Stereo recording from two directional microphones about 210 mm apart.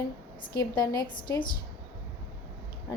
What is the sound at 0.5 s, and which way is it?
Speech, 20° left (ahead or behind).